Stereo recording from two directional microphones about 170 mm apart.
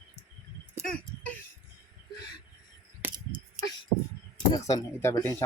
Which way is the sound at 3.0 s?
10° right (ahead or behind).